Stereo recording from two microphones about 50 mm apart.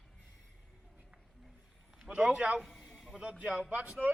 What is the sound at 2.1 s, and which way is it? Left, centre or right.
Speech, right.